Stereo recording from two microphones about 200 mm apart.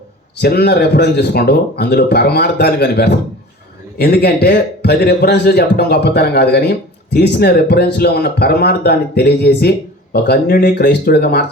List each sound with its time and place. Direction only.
0.4 s a man's voice: 50° left (ahead or behind)